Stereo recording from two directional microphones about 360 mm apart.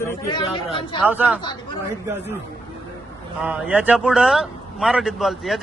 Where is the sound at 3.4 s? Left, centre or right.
Centre.